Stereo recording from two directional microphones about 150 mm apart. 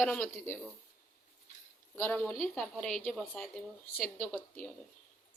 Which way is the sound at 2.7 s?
5° left (ahead or behind).